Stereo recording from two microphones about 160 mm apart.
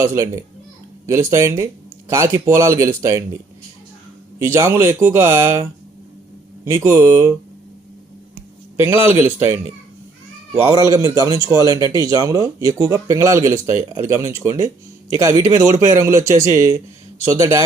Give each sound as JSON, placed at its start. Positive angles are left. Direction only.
{"t": 0.0, "sound": "speech", "side_deg": -15}
{"t": 4.4, "sound": "speech", "side_deg": -15}
{"t": 6.7, "sound": "speech", "side_deg": -15}
{"t": 8.8, "sound": "speech", "side_deg": -15}
{"t": 17.3, "sound": "speech", "side_deg": -20}